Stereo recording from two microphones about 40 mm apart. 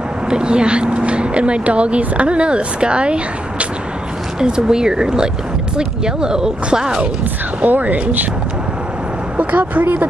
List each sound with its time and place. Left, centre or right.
0.3 s speech: right
7.6 s speech: right
9.4 s speech: right